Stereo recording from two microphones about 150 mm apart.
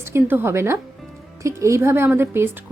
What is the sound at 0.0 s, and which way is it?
A woman's voice, 15° right (ahead or behind).